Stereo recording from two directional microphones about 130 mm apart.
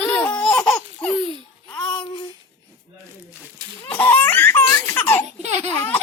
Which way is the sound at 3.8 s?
15° left (ahead or behind).